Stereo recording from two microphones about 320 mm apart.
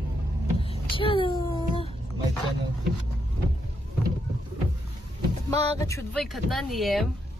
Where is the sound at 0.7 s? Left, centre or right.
Centre.